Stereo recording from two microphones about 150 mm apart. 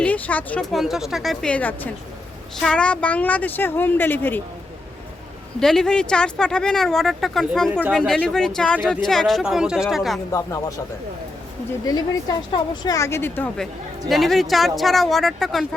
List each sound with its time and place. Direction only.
0.0 s a woman's voice: 10° left (ahead or behind)
5.5 s speech: 5° left (ahead or behind)
7.7 s speech: 10° right (ahead or behind)
7.9 s speech: 5° left (ahead or behind)
10.3 s a woman's voice: 20° left (ahead or behind)
11.9 s a woman's voice: 25° left (ahead or behind)
14.1 s speech: centre (ahead or behind)